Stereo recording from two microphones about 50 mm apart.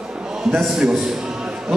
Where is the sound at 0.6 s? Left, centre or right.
Centre.